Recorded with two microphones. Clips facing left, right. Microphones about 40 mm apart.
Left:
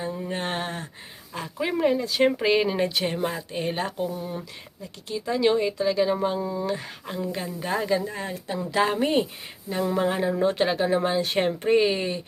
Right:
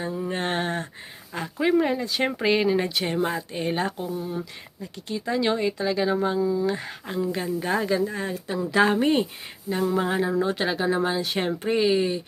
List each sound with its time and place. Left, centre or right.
0.1 s a sound: centre
1.4 s speech: centre
3.9 s speech: centre
4.4 s speech: centre
6.4 s speech: left
6.7 s speech: centre